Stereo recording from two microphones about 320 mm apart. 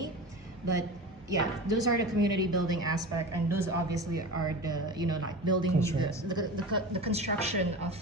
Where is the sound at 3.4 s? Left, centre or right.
Centre.